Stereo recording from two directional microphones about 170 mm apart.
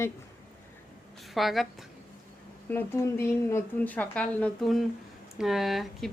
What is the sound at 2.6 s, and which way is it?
A woman's voice, 15° left (ahead or behind).